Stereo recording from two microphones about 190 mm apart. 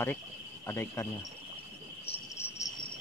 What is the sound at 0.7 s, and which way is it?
Speech, 15° left (ahead or behind).